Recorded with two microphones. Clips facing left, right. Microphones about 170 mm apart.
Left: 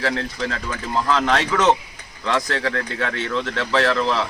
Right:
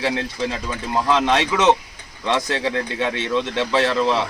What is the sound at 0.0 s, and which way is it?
Speech, 20° right (ahead or behind).